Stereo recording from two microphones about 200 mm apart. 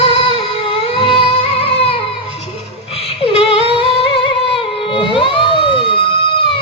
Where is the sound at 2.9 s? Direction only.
30° left (ahead or behind).